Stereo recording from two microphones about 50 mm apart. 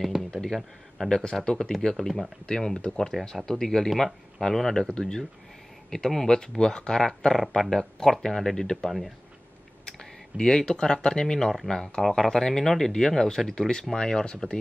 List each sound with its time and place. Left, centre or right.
0.3 s a sound: centre
1.0 s speech: centre
2.4 s speech: centre